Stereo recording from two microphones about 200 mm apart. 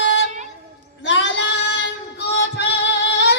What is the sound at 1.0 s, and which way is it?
Child singing, 65° left (ahead or behind).